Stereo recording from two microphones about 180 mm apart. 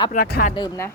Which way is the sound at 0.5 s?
20° left (ahead or behind).